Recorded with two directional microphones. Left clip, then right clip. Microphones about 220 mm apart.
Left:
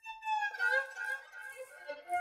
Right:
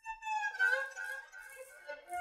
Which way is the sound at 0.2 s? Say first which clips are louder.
Even; 50° left (ahead or behind).